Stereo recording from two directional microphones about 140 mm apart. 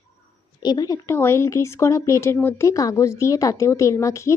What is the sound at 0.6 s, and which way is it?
Speech, 30° left (ahead or behind).